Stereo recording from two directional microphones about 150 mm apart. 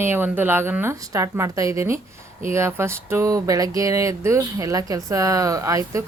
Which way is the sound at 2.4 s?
20° right (ahead or behind).